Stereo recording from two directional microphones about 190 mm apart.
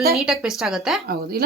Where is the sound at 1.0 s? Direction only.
55° right (ahead or behind).